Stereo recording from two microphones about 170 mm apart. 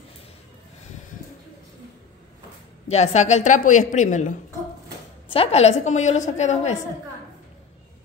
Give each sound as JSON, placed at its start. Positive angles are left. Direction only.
{"t": 2.9, "sound": "a woman's voice", "side_deg": 40}
{"t": 5.3, "sound": "a woman's voice", "side_deg": 35}